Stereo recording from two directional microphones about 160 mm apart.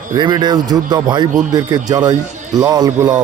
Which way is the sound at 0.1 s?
25° right (ahead or behind).